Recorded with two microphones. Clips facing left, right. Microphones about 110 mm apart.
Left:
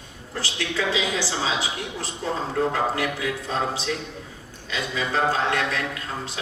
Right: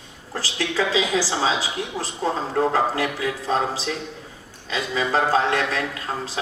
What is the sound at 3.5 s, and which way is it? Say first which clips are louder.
A man's voice: right 4 dB; 35° right (ahead or behind).